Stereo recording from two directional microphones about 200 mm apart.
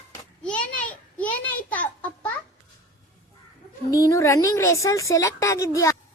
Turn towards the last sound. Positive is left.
turn(degrees=15)  # may be behind; listen again after turning